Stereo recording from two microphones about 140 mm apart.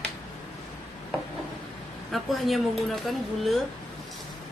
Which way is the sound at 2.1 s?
Centre (ahead or behind).